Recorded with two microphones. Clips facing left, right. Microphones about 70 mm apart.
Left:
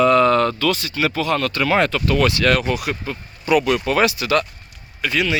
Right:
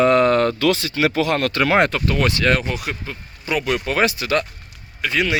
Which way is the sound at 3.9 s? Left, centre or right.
Centre.